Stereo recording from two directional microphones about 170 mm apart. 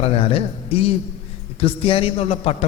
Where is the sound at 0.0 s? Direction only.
35° left (ahead or behind).